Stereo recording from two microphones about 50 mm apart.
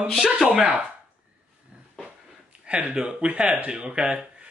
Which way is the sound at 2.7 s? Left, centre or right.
Right.